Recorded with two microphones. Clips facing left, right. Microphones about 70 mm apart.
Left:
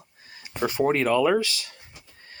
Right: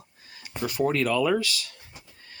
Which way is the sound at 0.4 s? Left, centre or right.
Left.